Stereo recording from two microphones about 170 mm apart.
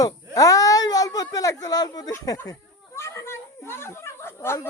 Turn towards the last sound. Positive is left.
turn(degrees=15)  # may be behind; listen again after turning